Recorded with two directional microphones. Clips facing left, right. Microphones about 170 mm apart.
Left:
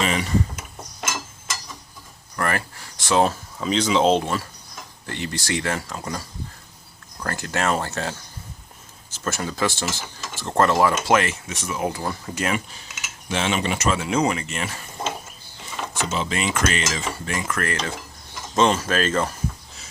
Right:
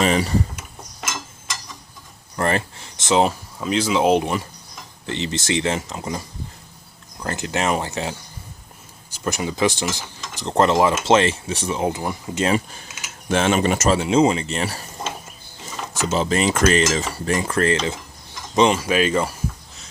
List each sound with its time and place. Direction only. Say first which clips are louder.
0.0 s a sound: right 5 dB; 35° right (ahead or behind)
1.0 s a sound: left 1 dB; 5° left (ahead or behind)
2.3 s speech: right 4 dB; 25° right (ahead or behind)
3.6 s speech: even; 5° right (ahead or behind)
9.1 s speech: right 3 dB; 15° right (ahead or behind)
13.2 s speech: right 5 dB; 50° right (ahead or behind)
14.0 s mechanisms: right 5 dB; 25° right (ahead or behind)
18.5 s speech: right 3 dB; 15° right (ahead or behind)